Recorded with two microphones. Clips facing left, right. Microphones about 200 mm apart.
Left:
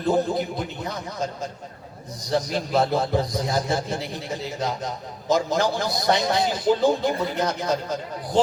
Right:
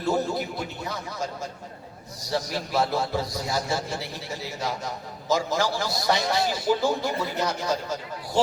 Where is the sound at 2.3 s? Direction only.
20° left (ahead or behind).